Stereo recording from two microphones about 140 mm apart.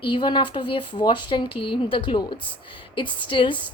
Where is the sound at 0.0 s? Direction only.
35° left (ahead or behind).